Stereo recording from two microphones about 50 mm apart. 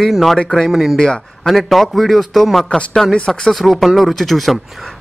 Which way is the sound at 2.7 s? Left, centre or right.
Centre.